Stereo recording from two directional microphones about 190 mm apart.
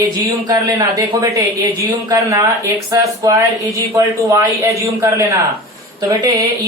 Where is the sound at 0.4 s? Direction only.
15° right (ahead or behind).